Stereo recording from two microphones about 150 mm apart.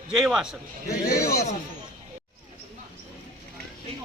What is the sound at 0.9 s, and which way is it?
Speech, 20° left (ahead or behind).